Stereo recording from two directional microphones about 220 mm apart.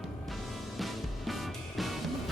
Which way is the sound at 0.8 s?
Centre (ahead or behind).